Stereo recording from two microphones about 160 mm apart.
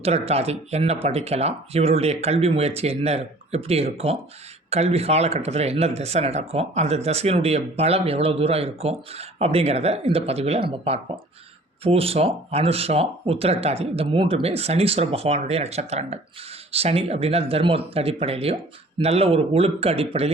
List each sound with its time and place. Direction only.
0.0 s speech: 40° right (ahead or behind)